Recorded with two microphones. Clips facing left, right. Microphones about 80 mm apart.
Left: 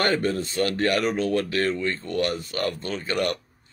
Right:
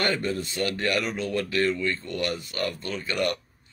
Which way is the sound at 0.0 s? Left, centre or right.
Left.